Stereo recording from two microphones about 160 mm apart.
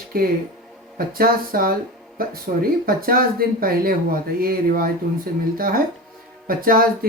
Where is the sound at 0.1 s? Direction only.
65° right (ahead or behind).